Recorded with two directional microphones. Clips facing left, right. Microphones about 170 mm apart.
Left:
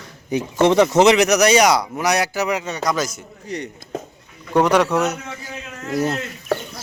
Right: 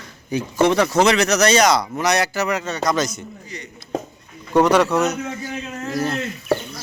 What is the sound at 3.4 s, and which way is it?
Speech, 65° left (ahead or behind).